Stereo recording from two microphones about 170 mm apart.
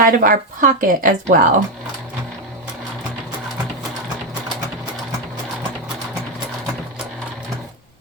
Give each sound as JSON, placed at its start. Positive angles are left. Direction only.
{"t": 0.0, "sound": "speech", "side_deg": -55}